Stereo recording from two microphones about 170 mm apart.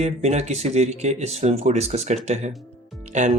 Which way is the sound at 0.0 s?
40° right (ahead or behind).